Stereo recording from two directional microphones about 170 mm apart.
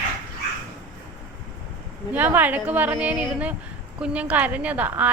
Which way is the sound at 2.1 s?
10° right (ahead or behind).